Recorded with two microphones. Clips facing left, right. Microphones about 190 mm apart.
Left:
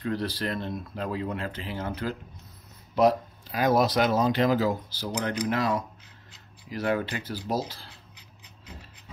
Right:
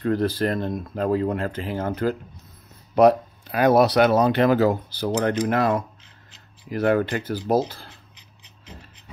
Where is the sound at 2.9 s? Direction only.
60° right (ahead or behind).